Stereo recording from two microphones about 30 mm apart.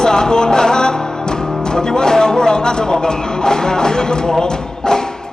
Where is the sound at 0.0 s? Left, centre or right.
Left.